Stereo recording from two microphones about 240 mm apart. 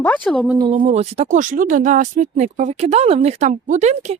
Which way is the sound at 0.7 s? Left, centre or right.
Right.